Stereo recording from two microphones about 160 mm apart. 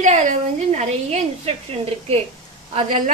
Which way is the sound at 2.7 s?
50° right (ahead or behind).